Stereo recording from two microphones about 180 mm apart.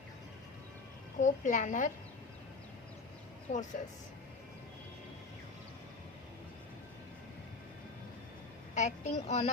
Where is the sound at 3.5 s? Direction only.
50° left (ahead or behind).